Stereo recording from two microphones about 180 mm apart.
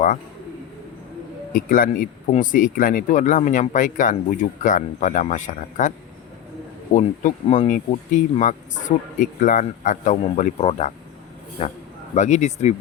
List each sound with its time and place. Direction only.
1.5 s speech: 50° left (ahead or behind)
6.9 s speech: 45° left (ahead or behind)